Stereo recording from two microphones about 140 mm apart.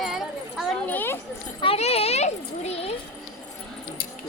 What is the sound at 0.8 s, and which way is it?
Speech, 15° left (ahead or behind).